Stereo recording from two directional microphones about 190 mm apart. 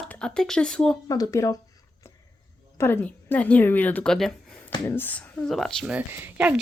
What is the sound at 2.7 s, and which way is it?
A woman's voice, 10° left (ahead or behind).